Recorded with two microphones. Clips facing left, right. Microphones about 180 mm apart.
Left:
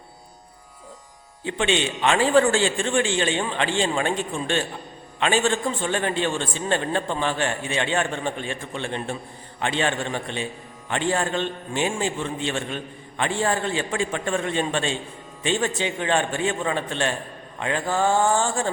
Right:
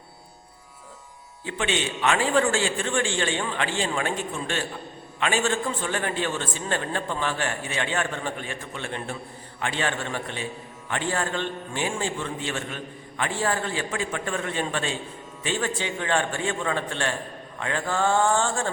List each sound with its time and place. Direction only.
1.5 s a man's voice: 25° left (ahead or behind)
17.6 s mantra: 20° left (ahead or behind)